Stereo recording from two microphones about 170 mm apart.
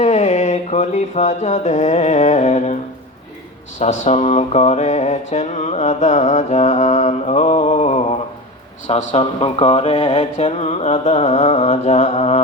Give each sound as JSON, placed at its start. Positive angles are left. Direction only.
{"t": 0.0, "sound": "music", "side_deg": 40}
{"t": 3.8, "sound": "mantra", "side_deg": 45}